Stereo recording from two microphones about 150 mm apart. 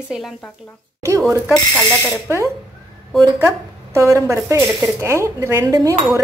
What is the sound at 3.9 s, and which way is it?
Speech, 20° right (ahead or behind).